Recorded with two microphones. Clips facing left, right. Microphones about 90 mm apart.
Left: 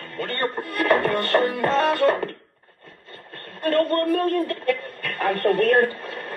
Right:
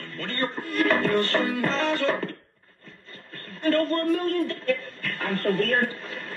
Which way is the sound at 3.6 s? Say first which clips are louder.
Left 2 dB; 50° left (ahead or behind).